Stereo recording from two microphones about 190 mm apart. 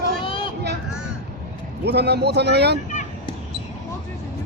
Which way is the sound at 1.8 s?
60° right (ahead or behind).